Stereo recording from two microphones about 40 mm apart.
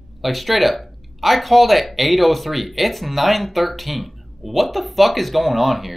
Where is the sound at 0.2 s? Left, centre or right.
Centre.